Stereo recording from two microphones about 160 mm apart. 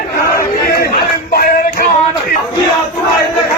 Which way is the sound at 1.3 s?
70° left (ahead or behind).